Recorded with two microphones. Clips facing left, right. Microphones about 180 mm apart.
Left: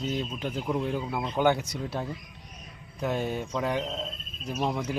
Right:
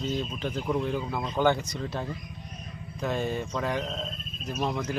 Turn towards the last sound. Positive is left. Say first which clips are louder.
# even
turn(degrees=10)  # may be behind; listen again after turning